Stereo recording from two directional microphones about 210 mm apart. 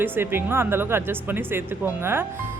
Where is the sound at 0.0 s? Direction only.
10° right (ahead or behind).